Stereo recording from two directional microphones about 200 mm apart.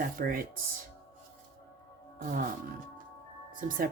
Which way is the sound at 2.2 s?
40° right (ahead or behind).